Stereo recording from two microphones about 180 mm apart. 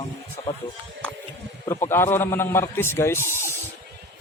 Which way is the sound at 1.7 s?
15° left (ahead or behind).